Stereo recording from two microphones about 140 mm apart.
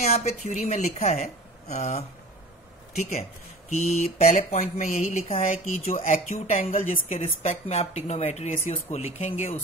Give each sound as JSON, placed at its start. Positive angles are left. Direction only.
{"t": 0.0, "sound": "speech", "side_deg": 50}